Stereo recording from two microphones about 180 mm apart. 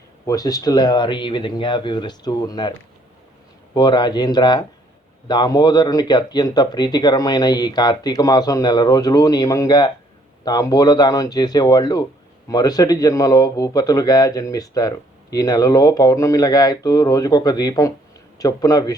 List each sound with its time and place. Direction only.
0.3 s speech: 20° left (ahead or behind)
3.8 s speech: 25° left (ahead or behind)